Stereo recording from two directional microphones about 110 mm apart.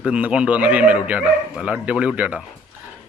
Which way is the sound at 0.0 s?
10° right (ahead or behind).